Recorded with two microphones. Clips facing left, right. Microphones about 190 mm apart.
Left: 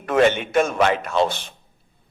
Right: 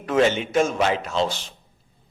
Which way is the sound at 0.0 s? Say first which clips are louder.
Left 2 dB; 60° left (ahead or behind).